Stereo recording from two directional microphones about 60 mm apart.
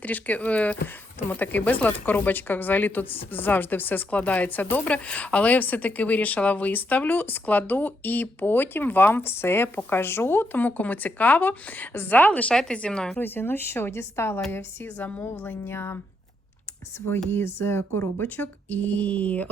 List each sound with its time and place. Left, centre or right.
0.0 s speech: left
13.1 s speech: left
14.9 s speech: left
17.2 s speech: left
18.8 s speech: left